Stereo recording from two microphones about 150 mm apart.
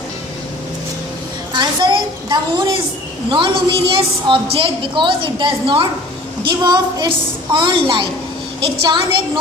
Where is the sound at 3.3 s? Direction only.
35° right (ahead or behind).